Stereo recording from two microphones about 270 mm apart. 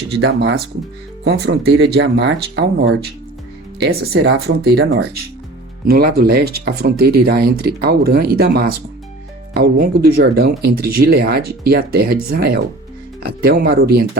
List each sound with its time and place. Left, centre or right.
0.2 s speech: right